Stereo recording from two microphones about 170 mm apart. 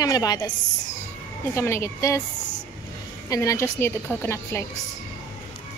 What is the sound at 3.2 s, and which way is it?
A woman's voice, 20° left (ahead or behind).